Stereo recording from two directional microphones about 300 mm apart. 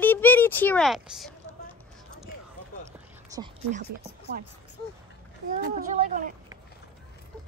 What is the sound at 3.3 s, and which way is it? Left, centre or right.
Speech, centre.